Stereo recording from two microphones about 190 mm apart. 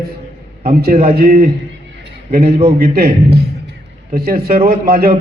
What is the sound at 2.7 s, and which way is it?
Speech, 55° right (ahead or behind).